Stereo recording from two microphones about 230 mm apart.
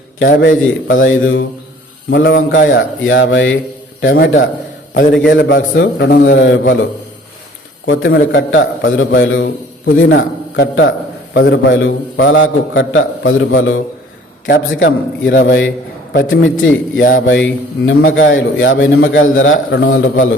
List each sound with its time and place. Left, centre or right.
0.2 s a man's voice: left
2.0 s a man's voice: left
4.9 s a man's voice: left
7.9 s a man's voice: left
17.2 s a man's voice: left